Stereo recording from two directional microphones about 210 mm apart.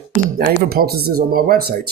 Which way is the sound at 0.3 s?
45° right (ahead or behind).